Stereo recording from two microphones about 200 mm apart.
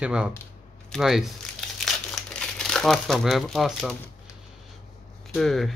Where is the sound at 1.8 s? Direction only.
5° left (ahead or behind).